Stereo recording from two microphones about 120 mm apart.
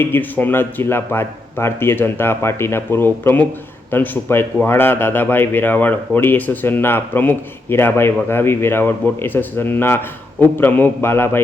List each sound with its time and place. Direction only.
0.0 s a man's voice: 15° left (ahead or behind)